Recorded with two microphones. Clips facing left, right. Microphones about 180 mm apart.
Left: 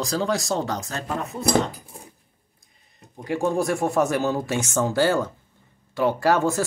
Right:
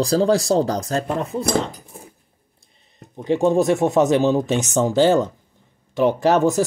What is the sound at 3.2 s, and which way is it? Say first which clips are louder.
Speech: right 6 dB; 20° right (ahead or behind).